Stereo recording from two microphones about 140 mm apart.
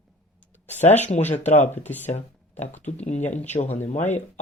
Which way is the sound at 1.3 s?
55° left (ahead or behind).